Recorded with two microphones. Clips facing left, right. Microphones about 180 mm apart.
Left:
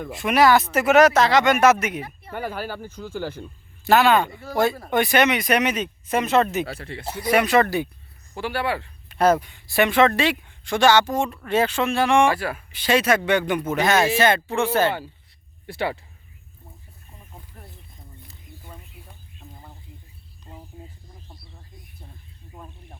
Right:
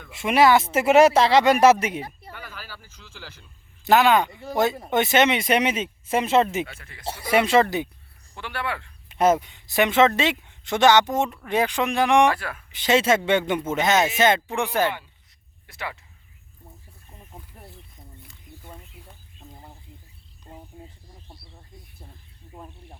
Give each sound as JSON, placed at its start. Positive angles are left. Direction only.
{"t": 0.2, "sound": "speech", "side_deg": -25}
{"t": 2.3, "sound": "speech", "side_deg": 50}
{"t": 3.8, "sound": "speech", "side_deg": -15}
{"t": 6.7, "sound": "speech", "side_deg": 30}
{"t": 7.0, "sound": "speech", "side_deg": -25}
{"t": 9.0, "sound": "speech", "side_deg": -20}
{"t": 12.3, "sound": "speech", "side_deg": 5}
{"t": 12.7, "sound": "speech", "side_deg": -20}
{"t": 15.6, "sound": "speech", "side_deg": 30}